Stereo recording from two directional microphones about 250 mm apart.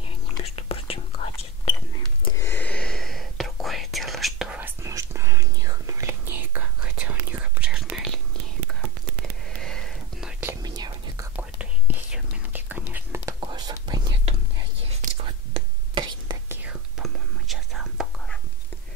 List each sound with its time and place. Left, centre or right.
0.4 s whispering: left
2.2 s whispering: centre
9.6 s sniff: centre
10.4 s whispering: centre
16.6 s whispering: centre